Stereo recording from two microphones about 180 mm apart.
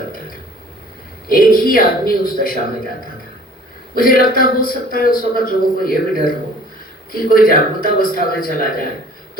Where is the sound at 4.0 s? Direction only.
50° left (ahead or behind).